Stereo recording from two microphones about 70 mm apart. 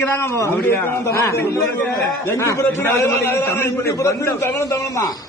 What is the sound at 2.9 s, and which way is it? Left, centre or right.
A man's voice, left.